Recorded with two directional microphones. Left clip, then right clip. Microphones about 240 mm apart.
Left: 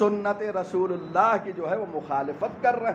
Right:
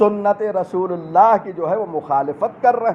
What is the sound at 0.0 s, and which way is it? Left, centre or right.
A man's voice, right.